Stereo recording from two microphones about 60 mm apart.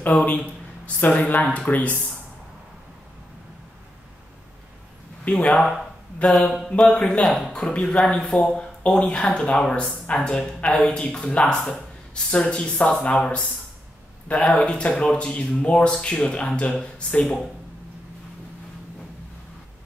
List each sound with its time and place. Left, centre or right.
0.0 s speech: left
5.2 s speech: left
5.6 s speech: centre
6.7 s speech: centre
7.2 s speech: centre
7.5 s speech: centre
17.2 s speech: centre